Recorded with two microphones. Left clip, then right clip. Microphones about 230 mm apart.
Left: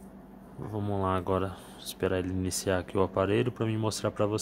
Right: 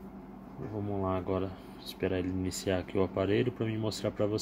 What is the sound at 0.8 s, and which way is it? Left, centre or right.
Speech, left.